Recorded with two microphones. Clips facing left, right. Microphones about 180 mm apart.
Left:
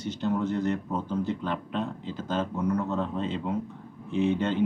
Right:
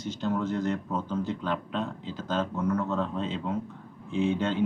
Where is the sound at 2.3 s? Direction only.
15° left (ahead or behind).